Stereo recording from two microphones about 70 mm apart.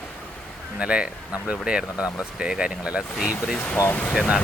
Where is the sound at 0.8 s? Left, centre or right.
Centre.